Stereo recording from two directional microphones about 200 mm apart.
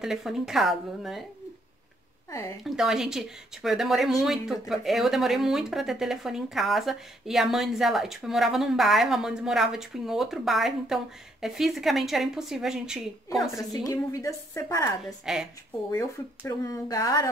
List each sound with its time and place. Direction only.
0.0 s speech: centre (ahead or behind)
2.6 s speech: centre (ahead or behind)
13.6 s a woman's voice: 15° left (ahead or behind)